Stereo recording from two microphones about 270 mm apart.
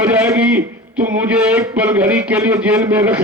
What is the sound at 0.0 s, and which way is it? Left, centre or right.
A man's voice, centre.